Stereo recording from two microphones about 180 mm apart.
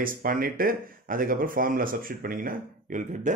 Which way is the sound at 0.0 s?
50° right (ahead or behind).